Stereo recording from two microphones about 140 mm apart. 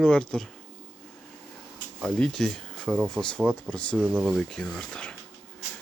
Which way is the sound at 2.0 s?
5° left (ahead or behind).